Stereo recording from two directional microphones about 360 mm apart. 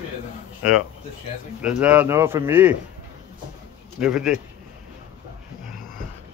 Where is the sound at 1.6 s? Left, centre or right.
Centre.